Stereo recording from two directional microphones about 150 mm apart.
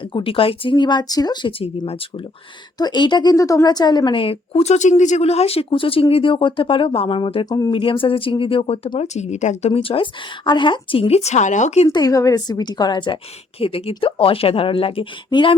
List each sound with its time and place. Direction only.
0.0 s a woman's voice: 35° left (ahead or behind)
7.4 s a woman's voice: 25° left (ahead or behind); by 11.9 s 50° left (ahead or behind)
11.9 s a woman's voice: 25° left (ahead or behind)